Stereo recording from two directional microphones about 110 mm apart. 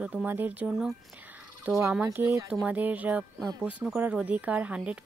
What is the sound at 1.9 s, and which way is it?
A woman's voice, 15° right (ahead or behind).